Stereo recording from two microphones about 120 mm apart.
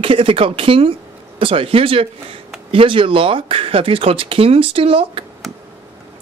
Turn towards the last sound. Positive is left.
turn(degrees=-50)  # may be behind; listen again after turning